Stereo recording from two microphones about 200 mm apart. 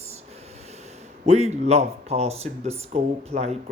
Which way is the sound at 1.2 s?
35° right (ahead or behind).